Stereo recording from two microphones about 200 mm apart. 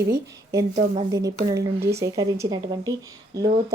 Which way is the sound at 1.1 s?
15° right (ahead or behind).